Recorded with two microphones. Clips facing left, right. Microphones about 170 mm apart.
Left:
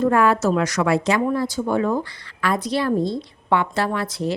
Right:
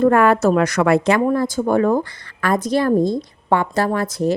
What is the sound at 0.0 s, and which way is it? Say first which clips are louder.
A woman's voice: right 4 dB; 55° right (ahead or behind).